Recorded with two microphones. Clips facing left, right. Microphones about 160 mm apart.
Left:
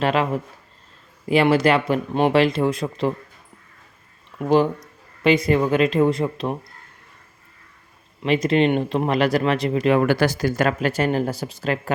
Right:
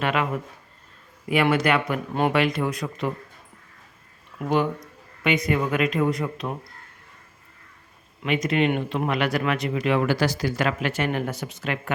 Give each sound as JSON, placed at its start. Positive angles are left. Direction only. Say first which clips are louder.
{"t": 0.0, "sound": "speech", "louder": "left 4 dB", "side_deg": 30}
{"t": 1.3, "sound": "speech", "louder": "left 4 dB", "side_deg": 30}
{"t": 4.4, "sound": "speech", "louder": "left 5 dB", "side_deg": 30}
{"t": 8.2, "sound": "speech", "louder": "left 4 dB", "side_deg": 30}
{"t": 10.1, "sound": "speech", "louder": "left 4 dB", "side_deg": 50}